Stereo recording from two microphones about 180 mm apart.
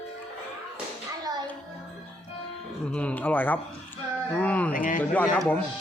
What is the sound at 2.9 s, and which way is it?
A man's voice, 5° left (ahead or behind).